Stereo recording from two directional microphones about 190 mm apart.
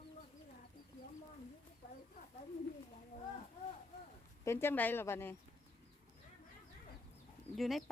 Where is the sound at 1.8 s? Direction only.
55° left (ahead or behind).